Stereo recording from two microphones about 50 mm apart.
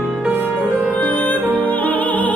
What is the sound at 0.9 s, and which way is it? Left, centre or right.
Music, left.